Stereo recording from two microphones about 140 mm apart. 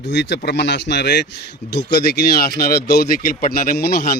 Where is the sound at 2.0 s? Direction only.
90° left.